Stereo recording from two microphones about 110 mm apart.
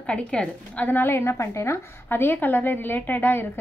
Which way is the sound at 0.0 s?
10° left (ahead or behind).